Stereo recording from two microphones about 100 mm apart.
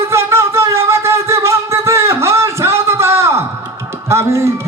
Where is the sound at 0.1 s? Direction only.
25° right (ahead or behind).